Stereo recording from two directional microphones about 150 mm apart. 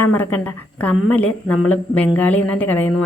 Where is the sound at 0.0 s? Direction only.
15° left (ahead or behind).